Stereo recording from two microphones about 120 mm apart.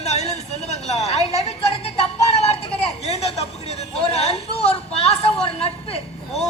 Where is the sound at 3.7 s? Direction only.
60° left (ahead or behind).